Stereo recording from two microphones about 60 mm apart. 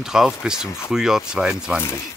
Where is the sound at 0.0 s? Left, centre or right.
Centre.